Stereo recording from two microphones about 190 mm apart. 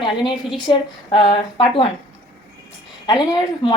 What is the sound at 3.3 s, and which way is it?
Speech, 20° left (ahead or behind).